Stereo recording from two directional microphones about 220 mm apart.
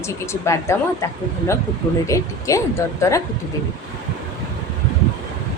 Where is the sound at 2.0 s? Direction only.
15° left (ahead or behind).